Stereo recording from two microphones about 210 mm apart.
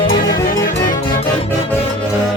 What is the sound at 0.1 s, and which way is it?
Music, 40° left (ahead or behind).